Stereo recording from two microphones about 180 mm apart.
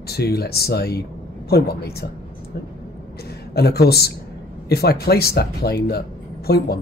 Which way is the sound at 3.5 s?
60° left (ahead or behind).